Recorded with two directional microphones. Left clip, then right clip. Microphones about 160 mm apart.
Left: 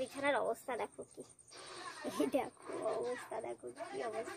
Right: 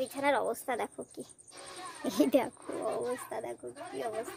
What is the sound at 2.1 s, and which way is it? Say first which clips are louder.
Speech: right 8 dB; 40° right (ahead or behind).